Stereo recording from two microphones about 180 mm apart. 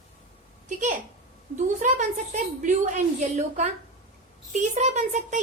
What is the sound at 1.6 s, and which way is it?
A woman's voice, 45° right (ahead or behind).